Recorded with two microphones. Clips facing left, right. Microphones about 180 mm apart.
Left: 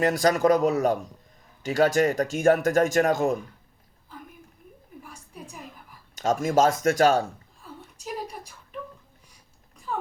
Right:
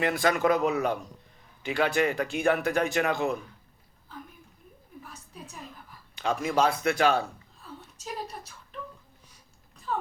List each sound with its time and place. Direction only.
0.0 s speech: 40° left (ahead or behind)
6.1 s speech: 45° left (ahead or behind)
7.9 s a sound: 10° left (ahead or behind)